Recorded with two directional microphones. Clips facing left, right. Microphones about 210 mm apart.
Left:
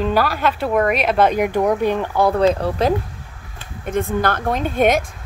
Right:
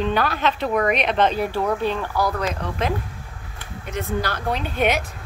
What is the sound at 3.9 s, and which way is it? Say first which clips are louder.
A woman's voice: left 6 dB; 50° left (ahead or behind).